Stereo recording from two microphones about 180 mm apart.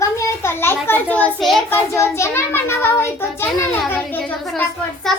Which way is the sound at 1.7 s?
15° left (ahead or behind).